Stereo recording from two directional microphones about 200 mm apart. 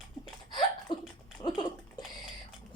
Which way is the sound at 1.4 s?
25° left (ahead or behind).